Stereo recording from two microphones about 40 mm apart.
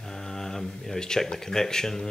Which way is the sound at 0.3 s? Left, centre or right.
Centre.